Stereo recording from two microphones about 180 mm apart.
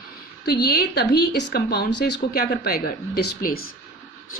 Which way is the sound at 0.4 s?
65° left (ahead or behind).